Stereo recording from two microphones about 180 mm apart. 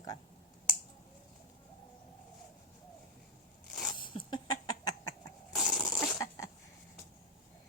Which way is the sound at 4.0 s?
25° left (ahead or behind).